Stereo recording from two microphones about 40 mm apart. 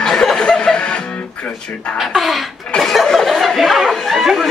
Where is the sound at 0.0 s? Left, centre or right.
Centre.